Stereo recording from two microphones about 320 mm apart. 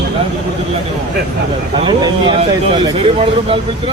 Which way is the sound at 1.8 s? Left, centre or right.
Centre.